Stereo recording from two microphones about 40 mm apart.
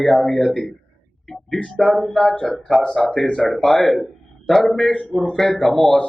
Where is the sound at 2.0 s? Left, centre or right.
Centre.